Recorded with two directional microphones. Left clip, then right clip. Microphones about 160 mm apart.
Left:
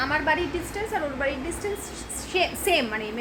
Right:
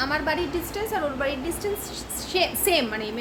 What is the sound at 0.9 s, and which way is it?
Speech, 10° right (ahead or behind).